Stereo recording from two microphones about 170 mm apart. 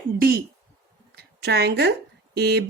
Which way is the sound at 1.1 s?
75° right (ahead or behind).